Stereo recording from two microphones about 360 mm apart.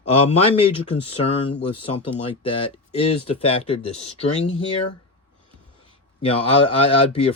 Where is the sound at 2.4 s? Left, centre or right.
Centre.